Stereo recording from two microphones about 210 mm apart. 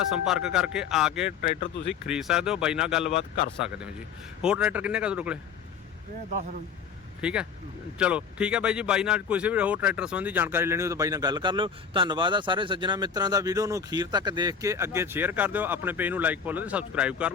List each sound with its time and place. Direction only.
0.0 s speech: centre (ahead or behind)
3.2 s speech: 30° left (ahead or behind)
4.4 s speech: 5° right (ahead or behind)
7.2 s speech: 5° right (ahead or behind)